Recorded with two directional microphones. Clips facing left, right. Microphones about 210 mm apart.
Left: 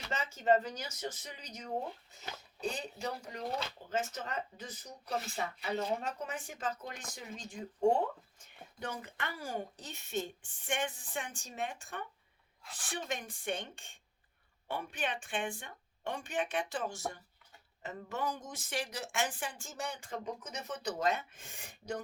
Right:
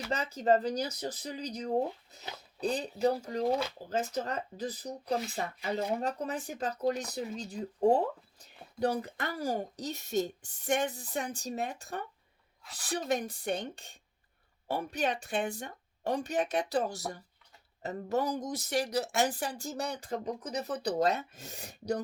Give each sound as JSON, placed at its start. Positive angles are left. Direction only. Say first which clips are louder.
{"t": 0.1, "sound": "speech", "louder": "right 2 dB", "side_deg": -35}